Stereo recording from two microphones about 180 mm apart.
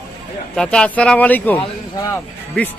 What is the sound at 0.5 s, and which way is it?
Speech, 5° left (ahead or behind).